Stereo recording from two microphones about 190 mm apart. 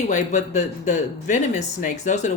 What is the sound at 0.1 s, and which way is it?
Speech, 40° left (ahead or behind).